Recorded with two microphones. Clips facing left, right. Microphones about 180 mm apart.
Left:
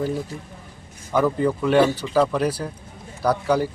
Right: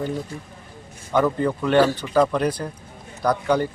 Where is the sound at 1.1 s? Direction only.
5° left (ahead or behind).